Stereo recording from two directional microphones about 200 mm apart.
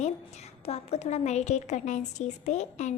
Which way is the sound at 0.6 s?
35° left (ahead or behind).